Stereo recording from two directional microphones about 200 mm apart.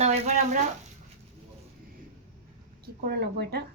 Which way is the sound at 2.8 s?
50° right (ahead or behind).